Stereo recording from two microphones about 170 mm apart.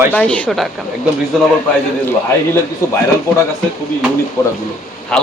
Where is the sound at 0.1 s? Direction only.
5° left (ahead or behind).